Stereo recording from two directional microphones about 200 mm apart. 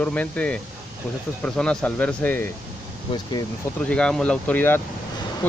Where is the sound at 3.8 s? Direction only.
5° left (ahead or behind).